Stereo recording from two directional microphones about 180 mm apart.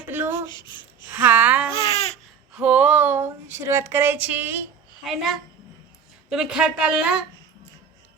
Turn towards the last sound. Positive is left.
turn(degrees=-5)  # may be behind; listen again after turning